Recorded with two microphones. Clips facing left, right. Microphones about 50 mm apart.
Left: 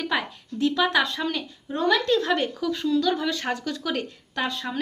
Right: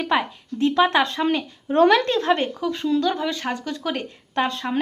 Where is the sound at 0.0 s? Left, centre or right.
Right.